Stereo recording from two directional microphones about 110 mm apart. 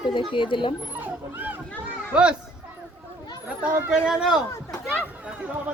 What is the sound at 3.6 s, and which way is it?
Speech, 15° right (ahead or behind).